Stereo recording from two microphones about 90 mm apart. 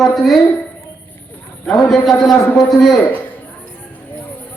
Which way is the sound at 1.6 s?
5° left (ahead or behind).